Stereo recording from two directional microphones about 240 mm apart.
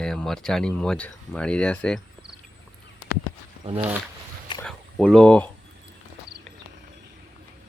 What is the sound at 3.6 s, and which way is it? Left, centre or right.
Speech, right.